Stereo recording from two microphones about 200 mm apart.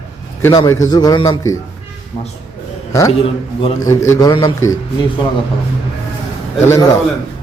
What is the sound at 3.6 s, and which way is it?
A man's voice, 15° left (ahead or behind).